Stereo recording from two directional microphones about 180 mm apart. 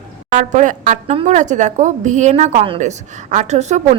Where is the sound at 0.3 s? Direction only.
45° right (ahead or behind).